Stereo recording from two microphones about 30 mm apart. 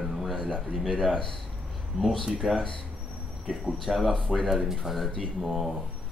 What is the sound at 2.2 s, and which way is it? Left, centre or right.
Speech, centre.